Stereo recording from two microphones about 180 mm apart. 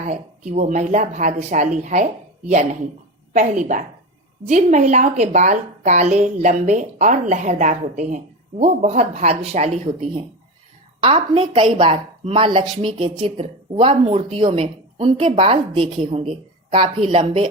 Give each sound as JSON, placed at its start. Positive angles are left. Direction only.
{"t": 0.1, "sound": "a woman's voice", "side_deg": -40}
{"t": 3.3, "sound": "a woman's voice", "side_deg": -45}